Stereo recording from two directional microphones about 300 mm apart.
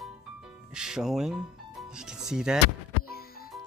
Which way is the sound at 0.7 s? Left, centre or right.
Centre.